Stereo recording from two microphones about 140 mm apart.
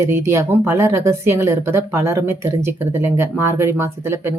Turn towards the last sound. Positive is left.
turn(degrees=-20)  # may be behind; listen again after turning